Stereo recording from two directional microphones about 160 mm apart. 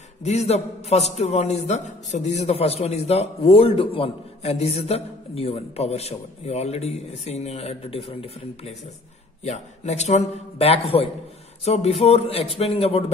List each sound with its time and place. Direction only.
0.2 s a man's voice: 45° left (ahead or behind)